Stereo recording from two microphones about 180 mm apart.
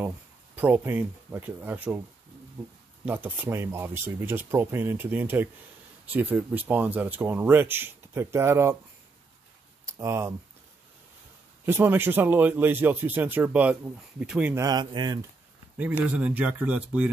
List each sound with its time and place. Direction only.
0.6 s speech: 10° right (ahead or behind)
3.1 s speech: 10° right (ahead or behind)
9.8 s speech: 15° right (ahead or behind)
11.6 s speech: 10° right (ahead or behind)
14.5 s speech: 20° right (ahead or behind)
16.1 s speech: 10° right (ahead or behind)